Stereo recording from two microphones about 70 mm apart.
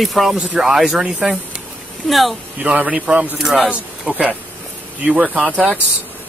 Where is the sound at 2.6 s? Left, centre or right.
Centre.